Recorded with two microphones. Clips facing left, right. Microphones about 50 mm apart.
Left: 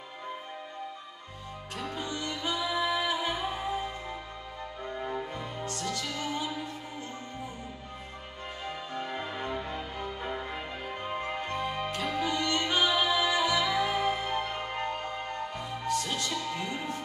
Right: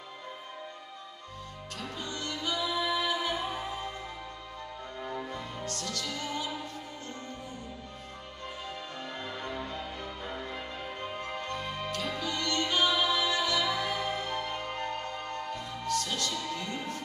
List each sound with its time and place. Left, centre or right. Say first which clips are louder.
1.8 s music: left 3 dB; left
5.0 s music: left 1 dB; centre
8.6 s music: left 8 dB; centre